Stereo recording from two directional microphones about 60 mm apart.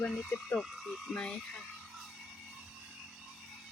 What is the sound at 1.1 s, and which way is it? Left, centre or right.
Frog, centre.